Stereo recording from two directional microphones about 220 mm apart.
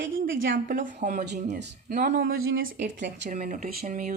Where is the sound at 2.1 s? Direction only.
65° right (ahead or behind).